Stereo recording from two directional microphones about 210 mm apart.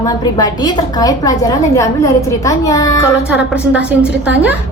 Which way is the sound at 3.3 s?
5° right (ahead or behind).